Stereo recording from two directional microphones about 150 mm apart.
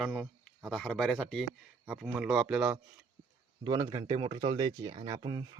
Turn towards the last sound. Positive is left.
turn(degrees=-30)  # may be behind; listen again after turning